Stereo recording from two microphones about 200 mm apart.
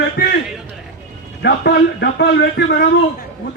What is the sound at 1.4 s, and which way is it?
A man's voice, 55° left (ahead or behind).